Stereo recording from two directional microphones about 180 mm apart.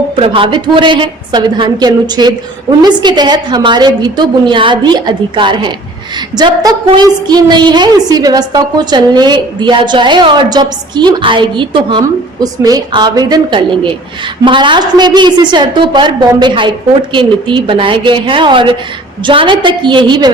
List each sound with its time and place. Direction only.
0.2 s a woman's voice: 30° right (ahead or behind)